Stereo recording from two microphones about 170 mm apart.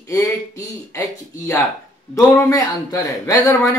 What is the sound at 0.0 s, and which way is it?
A man's voice, 20° left (ahead or behind).